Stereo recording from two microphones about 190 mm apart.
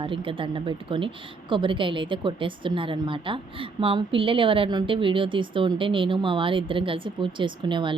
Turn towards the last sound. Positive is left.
turn(degrees=-25)  # may be behind; listen again after turning